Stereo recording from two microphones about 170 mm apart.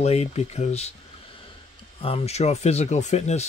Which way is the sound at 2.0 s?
35° left (ahead or behind).